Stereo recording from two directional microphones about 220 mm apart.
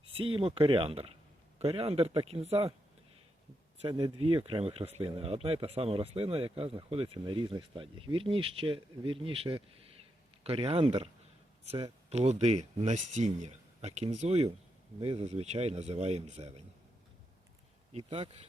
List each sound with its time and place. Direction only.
0.2 s speech: 25° right (ahead or behind)
3.8 s speech: 20° right (ahead or behind)
17.9 s speech: 25° right (ahead or behind)